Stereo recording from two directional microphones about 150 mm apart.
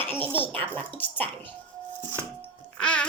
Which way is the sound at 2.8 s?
10° left (ahead or behind).